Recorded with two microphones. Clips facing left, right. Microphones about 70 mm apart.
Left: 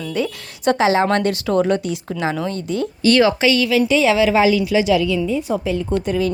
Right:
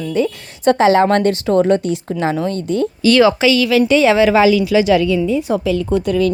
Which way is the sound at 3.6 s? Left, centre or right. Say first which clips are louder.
Right 3 dB; right.